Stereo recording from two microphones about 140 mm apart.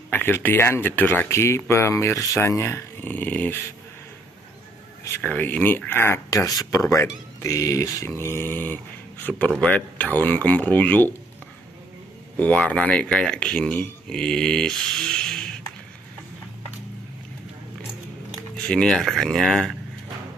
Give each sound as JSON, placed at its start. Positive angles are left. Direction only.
{"t": 0.1, "sound": "speech", "side_deg": 15}
{"t": 5.2, "sound": "speech", "side_deg": 10}
{"t": 12.4, "sound": "speech", "side_deg": 10}
{"t": 18.7, "sound": "speech", "side_deg": 5}